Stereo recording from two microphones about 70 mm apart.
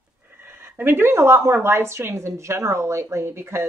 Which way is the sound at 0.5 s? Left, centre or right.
Right.